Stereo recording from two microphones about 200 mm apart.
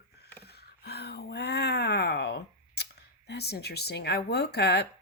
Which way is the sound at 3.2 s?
55° left (ahead or behind).